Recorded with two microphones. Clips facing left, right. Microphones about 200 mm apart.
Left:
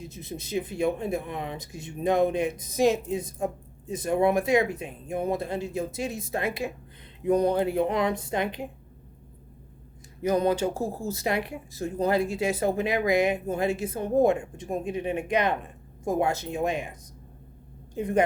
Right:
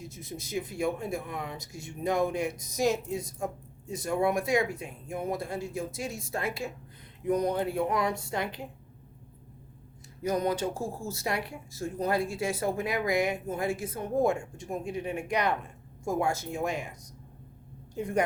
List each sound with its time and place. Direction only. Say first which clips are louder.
0.0 s speech: left 3 dB; 20° left (ahead or behind)
7.3 s speech: left 5 dB; 30° left (ahead or behind)
11.2 s speech: left 4 dB; 20° left (ahead or behind)
17.9 s a woman's voice: left 4 dB; 20° left (ahead or behind)